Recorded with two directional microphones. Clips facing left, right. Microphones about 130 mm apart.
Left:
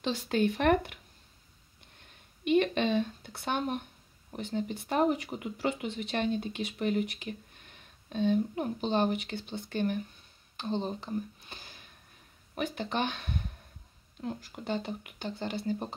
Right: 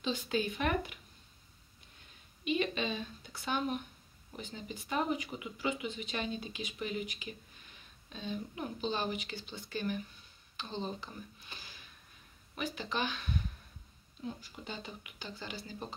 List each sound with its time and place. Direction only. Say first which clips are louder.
0.0 s speech: left 5 dB; 65° left (ahead or behind)
2.4 s speech: left 7 dB; 60° left (ahead or behind)